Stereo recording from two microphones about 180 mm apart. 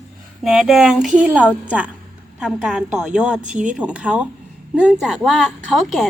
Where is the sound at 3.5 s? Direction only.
45° right (ahead or behind).